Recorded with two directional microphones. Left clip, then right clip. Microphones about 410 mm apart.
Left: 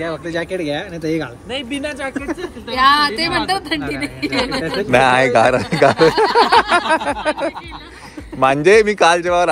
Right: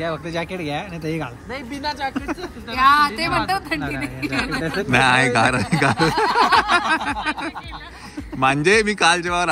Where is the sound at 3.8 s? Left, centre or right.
Right.